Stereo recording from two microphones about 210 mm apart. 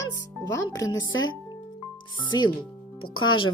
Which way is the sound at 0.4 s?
15° left (ahead or behind).